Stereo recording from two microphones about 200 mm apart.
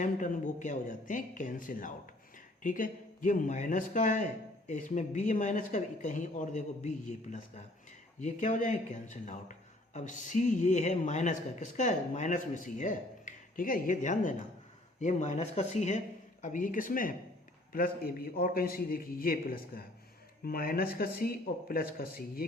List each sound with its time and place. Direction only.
0.0 s a man's voice: 40° left (ahead or behind)